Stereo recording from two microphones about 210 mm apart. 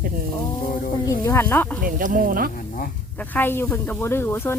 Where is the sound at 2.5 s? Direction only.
40° left (ahead or behind).